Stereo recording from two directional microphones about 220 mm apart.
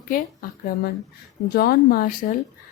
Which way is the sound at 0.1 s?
40° left (ahead or behind).